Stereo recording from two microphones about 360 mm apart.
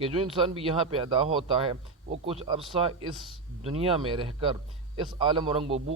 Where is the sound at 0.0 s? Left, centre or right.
Centre.